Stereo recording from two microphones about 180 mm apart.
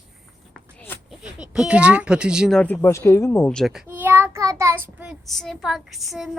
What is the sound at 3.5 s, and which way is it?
A child's voice, centre (ahead or behind).